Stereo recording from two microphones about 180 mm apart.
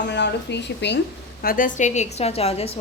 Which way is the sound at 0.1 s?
75° left (ahead or behind).